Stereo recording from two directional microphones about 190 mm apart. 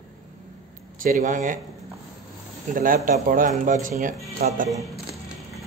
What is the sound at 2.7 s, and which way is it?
Speech, 45° right (ahead or behind).